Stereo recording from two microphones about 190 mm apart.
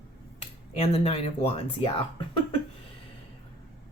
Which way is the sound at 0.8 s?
35° left (ahead or behind).